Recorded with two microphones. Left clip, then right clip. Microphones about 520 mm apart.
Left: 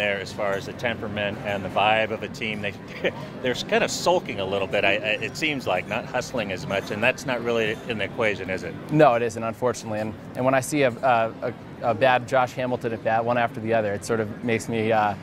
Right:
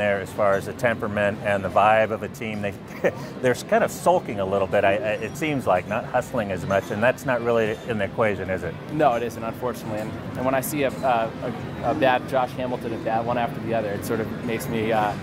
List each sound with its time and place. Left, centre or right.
0.0 s speech: centre
8.9 s speech: left